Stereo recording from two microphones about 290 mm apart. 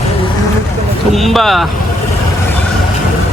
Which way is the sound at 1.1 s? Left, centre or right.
Centre.